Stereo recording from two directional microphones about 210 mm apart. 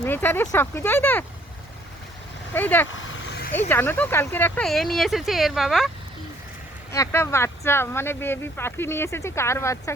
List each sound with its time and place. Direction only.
0.0 s speech: 10° left (ahead or behind)
2.5 s speech: 10° left (ahead or behind)
3.2 s vehicle: 50° left (ahead or behind)
3.5 s speech: 10° left (ahead or behind)
6.9 s speech: 15° left (ahead or behind)